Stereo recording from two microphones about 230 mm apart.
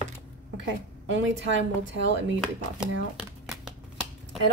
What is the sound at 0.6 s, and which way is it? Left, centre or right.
A woman's voice, right.